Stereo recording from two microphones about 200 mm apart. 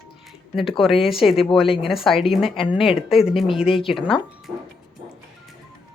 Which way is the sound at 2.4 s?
25° left (ahead or behind).